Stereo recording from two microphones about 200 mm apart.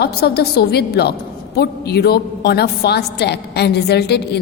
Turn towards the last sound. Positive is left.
turn(degrees=55)  # may be behind; listen again after turning